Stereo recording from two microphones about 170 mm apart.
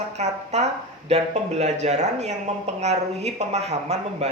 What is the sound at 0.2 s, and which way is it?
Speech, 40° right (ahead or behind).